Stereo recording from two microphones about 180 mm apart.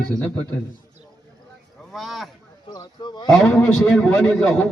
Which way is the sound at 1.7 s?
Centre (ahead or behind).